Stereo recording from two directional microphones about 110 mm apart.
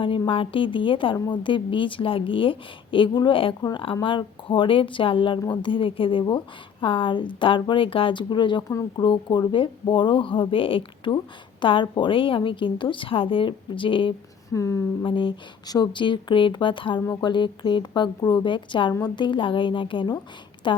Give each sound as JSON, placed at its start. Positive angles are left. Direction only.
{"t": 0.0, "sound": "a woman's voice", "side_deg": 50}
{"t": 14.5, "sound": "speech", "side_deg": 25}
{"t": 15.0, "sound": "a woman's voice", "side_deg": 50}
{"t": 15.6, "sound": "a woman's voice", "side_deg": 35}